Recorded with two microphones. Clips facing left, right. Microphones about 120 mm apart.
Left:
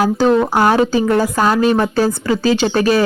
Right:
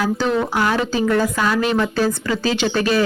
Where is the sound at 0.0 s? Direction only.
40° left (ahead or behind).